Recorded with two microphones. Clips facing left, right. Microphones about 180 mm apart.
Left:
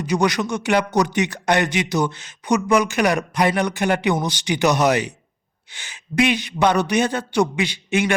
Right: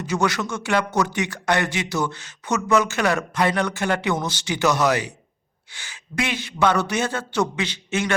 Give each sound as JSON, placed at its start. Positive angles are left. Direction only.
{"t": 0.0, "sound": "speech", "side_deg": 15}